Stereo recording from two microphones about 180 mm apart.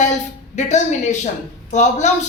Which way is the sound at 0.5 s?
40° left (ahead or behind).